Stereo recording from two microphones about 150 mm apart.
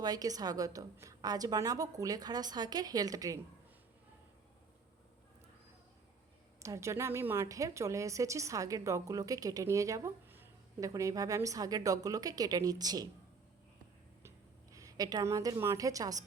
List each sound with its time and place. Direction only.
0.0 s a woman's voice: 25° right (ahead or behind)
6.6 s a woman's voice: 20° right (ahead or behind)
14.2 s a sound: 20° right (ahead or behind)